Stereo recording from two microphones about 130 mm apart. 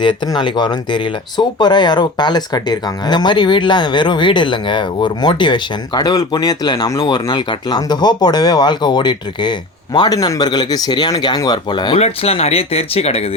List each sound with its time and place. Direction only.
0.0 s speech: 35° left (ahead or behind)
11.9 s speech: 50° left (ahead or behind)